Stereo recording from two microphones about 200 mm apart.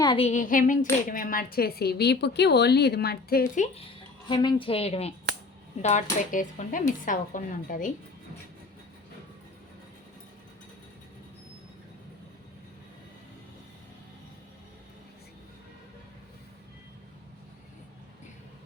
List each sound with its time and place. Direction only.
0.0 s a sound: 25° left (ahead or behind)
0.3 s speech: 40° left (ahead or behind)
4.3 s a woman's voice: 25° left (ahead or behind); by 7.9 s 40° left (ahead or behind)